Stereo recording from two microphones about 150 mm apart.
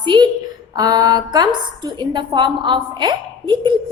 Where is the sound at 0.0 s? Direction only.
30° right (ahead or behind).